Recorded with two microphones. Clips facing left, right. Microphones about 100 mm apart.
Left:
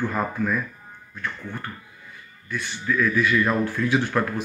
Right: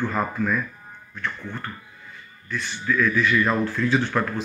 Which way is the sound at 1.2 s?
10° left (ahead or behind).